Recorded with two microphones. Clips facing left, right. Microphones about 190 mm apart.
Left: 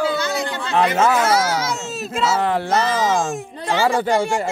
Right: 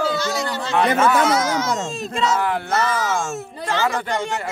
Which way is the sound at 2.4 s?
30° left (ahead or behind).